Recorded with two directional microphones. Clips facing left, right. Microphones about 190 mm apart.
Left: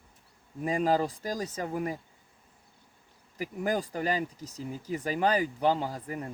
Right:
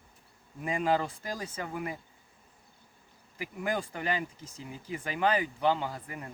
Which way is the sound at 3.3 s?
40° left (ahead or behind).